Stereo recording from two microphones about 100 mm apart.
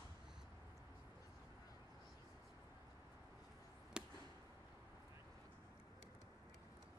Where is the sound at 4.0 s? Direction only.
5° right (ahead or behind).